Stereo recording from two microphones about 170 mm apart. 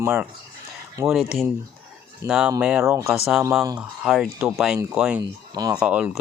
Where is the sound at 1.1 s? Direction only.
Centre (ahead or behind).